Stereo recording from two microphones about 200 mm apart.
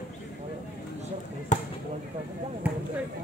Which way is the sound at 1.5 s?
35° left (ahead or behind).